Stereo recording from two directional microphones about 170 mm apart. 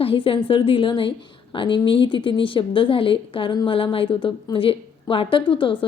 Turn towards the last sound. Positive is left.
turn(degrees=30)  # may be behind; listen again after turning